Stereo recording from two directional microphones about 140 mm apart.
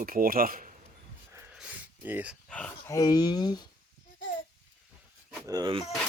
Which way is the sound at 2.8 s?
25° left (ahead or behind).